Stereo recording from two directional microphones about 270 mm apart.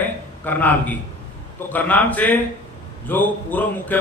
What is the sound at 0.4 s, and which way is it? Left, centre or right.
A man's voice, centre.